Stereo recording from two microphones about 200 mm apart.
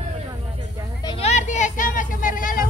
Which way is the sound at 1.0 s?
30° left (ahead or behind).